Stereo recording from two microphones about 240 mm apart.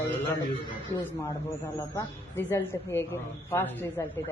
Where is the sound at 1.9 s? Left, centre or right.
Centre.